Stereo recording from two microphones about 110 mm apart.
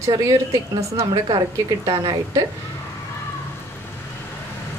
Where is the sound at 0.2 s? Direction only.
30° right (ahead or behind).